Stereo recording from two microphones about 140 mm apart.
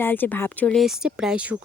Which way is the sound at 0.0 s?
15° left (ahead or behind).